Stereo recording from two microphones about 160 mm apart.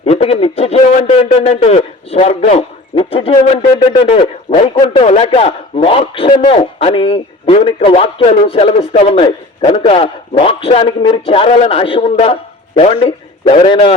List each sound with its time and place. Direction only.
0.0 s a man's voice: 40° left (ahead or behind)
9.8 s a man's voice: 40° left (ahead or behind)